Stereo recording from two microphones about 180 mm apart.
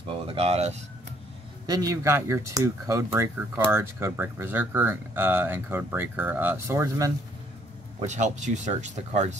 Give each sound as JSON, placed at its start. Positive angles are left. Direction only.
{"t": 0.3, "sound": "speech", "side_deg": -35}
{"t": 1.7, "sound": "speech", "side_deg": -20}
{"t": 8.0, "sound": "speech", "side_deg": -40}